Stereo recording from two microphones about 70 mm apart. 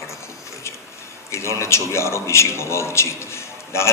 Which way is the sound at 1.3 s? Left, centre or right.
Left.